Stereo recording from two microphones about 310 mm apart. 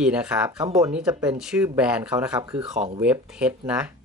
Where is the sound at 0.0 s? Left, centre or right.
Centre.